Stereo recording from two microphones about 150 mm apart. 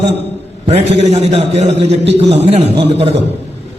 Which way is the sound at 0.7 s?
45° right (ahead or behind).